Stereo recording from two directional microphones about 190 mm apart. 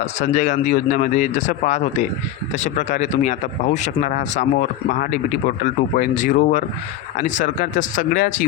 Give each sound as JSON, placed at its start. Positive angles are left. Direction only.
{"t": 0.2, "sound": "speech", "side_deg": 40}